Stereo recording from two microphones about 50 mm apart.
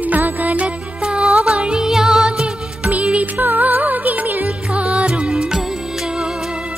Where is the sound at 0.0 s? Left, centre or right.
Right.